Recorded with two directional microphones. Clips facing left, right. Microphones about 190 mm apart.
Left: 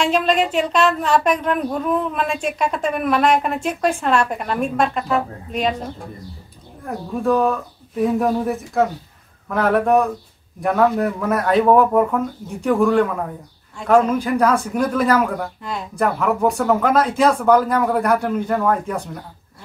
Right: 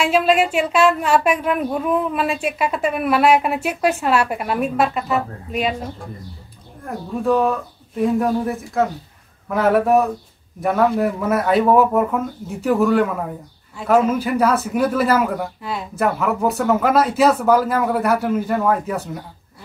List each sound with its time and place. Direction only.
0.0 s speech: 5° right (ahead or behind)
6.8 s speech: centre (ahead or behind)